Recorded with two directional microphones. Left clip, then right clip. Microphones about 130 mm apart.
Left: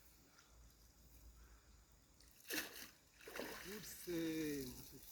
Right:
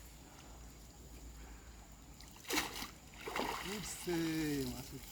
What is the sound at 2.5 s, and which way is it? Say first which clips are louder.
Splash: right 9 dB; 20° left (ahead or behind).